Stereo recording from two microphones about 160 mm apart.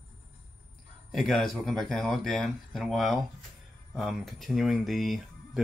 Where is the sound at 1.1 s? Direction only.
Centre (ahead or behind).